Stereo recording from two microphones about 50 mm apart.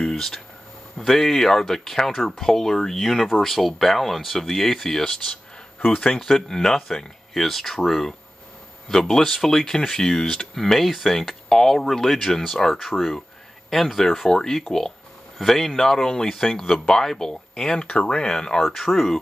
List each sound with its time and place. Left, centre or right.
0.0 s a sound: centre
0.9 s speech: centre
6.1 s speech: centre
17.8 s speech: left
18.1 s speech: centre